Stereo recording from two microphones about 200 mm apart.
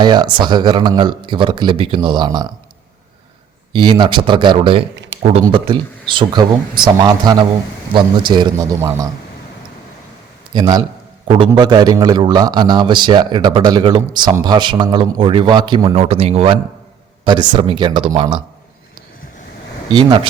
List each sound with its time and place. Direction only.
0.0 s a man's voice: 20° right (ahead or behind)
3.7 s a man's voice: 20° right (ahead or behind)
10.5 s a man's voice: 20° right (ahead or behind)
19.9 s a man's voice: 20° right (ahead or behind)